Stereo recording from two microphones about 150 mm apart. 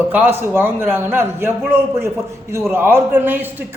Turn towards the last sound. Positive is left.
turn(degrees=-15)  # may be behind; listen again after turning